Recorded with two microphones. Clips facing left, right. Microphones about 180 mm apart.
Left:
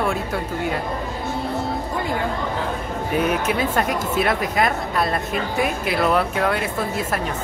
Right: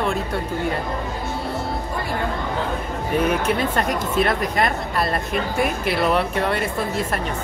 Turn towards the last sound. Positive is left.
turn(degrees=0)  # may be behind; listen again after turning